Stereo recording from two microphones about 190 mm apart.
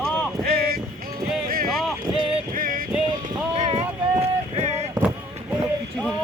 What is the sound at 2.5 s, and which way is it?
Music, 45° right (ahead or behind).